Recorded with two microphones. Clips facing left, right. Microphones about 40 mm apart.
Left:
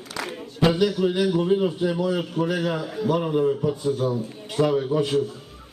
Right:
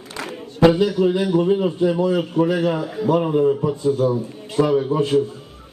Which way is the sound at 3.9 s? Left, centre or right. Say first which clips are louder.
Right 5 dB; right.